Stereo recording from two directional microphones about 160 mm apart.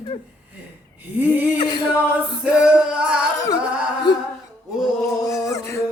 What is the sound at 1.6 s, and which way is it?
Chant, 30° left (ahead or behind).